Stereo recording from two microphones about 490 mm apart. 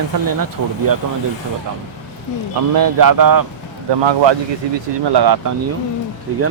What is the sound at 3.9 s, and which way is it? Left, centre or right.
Speech, right.